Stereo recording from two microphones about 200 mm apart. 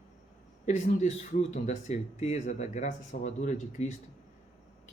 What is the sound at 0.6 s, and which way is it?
Speech, 35° left (ahead or behind).